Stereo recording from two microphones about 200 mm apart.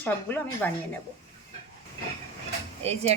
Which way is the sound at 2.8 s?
30° right (ahead or behind).